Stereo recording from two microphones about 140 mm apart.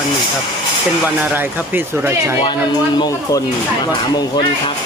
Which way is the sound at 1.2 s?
15° right (ahead or behind).